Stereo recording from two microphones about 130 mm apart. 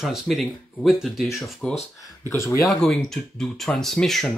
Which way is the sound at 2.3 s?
20° left (ahead or behind).